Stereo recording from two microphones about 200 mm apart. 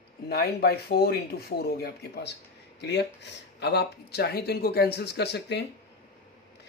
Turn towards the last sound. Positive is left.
turn(degrees=60)  # may be behind; listen again after turning